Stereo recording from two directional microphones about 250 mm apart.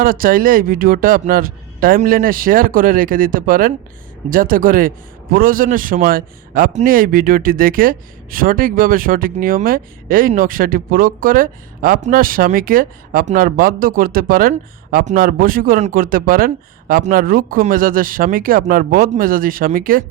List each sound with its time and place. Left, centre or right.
0.0 s a man's voice: right